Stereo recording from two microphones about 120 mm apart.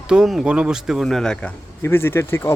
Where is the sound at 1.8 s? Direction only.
20° left (ahead or behind).